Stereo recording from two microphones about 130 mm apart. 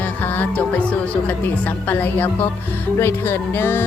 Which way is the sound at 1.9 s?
15° left (ahead or behind).